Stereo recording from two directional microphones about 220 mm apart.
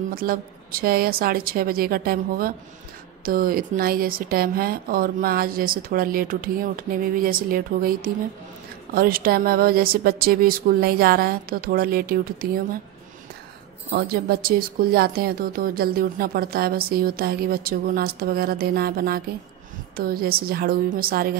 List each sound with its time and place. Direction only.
0.1 s speech: 40° right (ahead or behind)
13.8 s speech: 50° right (ahead or behind)